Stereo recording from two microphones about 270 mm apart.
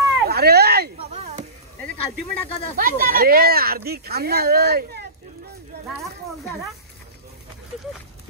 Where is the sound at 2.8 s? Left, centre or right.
Right.